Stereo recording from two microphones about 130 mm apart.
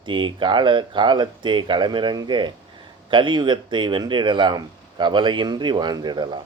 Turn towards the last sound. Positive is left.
turn(degrees=-35)  # may be behind; listen again after turning